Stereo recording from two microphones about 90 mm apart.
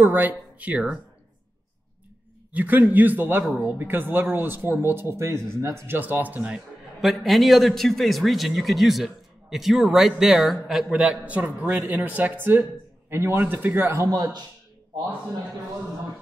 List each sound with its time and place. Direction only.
0.0 s speech: 20° right (ahead or behind)
2.5 s speech: 15° right (ahead or behind)
7.0 s a man's voice: centre (ahead or behind); by 13.9 s 20° right (ahead or behind)
13.9 s a man's voice: 40° right (ahead or behind)